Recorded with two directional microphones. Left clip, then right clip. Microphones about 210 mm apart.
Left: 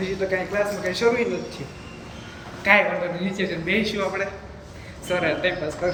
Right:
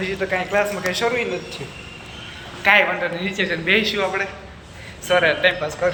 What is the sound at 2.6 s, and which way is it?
A man's voice, 5° left (ahead or behind).